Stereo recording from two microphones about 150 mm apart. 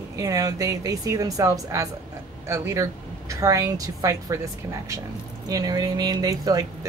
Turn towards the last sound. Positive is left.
turn(degrees=-25)  # may be behind; listen again after turning